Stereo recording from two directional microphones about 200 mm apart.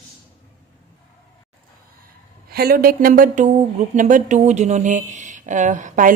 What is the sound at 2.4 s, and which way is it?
Speech, 50° right (ahead or behind).